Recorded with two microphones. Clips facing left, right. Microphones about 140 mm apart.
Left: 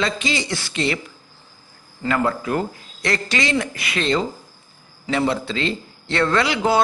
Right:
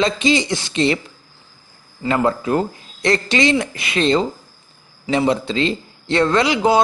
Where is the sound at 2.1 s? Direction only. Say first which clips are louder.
Right 3 dB; 25° right (ahead or behind).